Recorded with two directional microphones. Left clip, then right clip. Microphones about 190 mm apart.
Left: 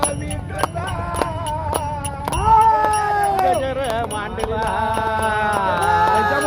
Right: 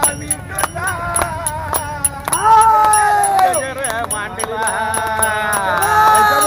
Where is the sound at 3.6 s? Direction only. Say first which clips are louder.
Even; 45° left (ahead or behind).